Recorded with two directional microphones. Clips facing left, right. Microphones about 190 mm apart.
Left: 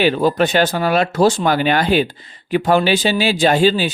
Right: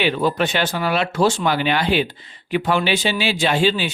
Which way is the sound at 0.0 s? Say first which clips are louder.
Left 4 dB; 40° left (ahead or behind).